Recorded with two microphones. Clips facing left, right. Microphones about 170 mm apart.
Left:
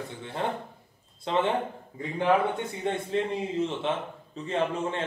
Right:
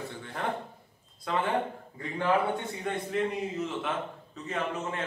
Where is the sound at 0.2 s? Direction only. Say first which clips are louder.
Left 6 dB; 25° left (ahead or behind).